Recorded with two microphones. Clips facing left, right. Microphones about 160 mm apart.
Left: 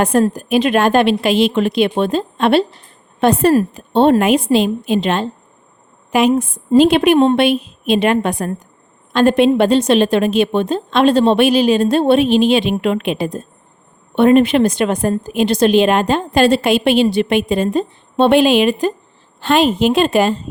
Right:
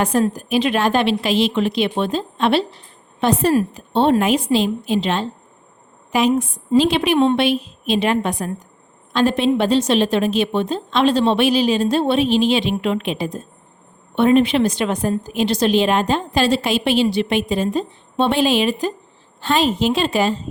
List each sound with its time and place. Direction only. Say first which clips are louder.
0.0 s a woman's voice: left 4 dB; 55° left (ahead or behind)